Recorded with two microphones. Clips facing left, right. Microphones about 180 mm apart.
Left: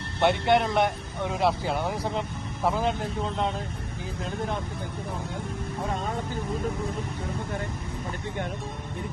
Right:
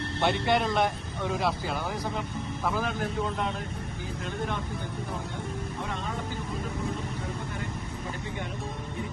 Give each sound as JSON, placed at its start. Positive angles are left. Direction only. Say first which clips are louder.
{"t": 0.2, "sound": "speech", "louder": "left 4 dB", "side_deg": 20}